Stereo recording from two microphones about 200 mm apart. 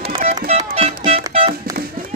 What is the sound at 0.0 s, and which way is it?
Music, 30° right (ahead or behind).